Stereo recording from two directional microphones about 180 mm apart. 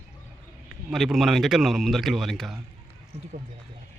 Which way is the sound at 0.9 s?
Centre (ahead or behind).